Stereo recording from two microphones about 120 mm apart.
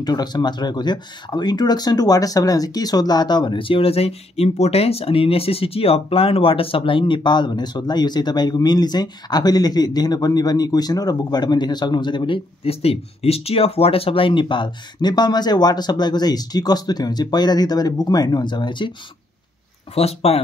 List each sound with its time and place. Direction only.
0.0 s speech: 35° left (ahead or behind)
12.6 s speech: 55° left (ahead or behind)
19.9 s speech: 60° left (ahead or behind)